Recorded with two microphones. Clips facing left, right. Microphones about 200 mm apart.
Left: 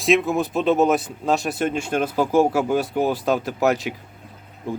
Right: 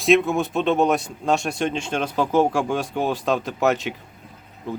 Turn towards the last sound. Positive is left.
turn(degrees=10)  # may be behind; listen again after turning